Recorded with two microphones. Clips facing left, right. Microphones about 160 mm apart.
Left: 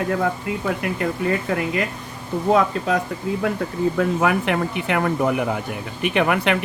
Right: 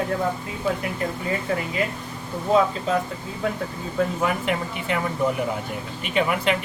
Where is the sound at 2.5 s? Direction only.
70° left (ahead or behind).